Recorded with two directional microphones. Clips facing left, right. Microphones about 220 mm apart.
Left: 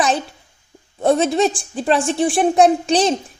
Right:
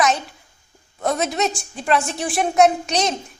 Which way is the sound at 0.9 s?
30° left (ahead or behind).